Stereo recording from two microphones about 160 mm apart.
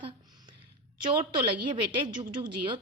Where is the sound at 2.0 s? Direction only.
25° right (ahead or behind).